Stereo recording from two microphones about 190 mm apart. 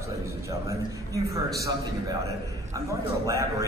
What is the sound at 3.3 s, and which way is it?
Speech, 15° right (ahead or behind).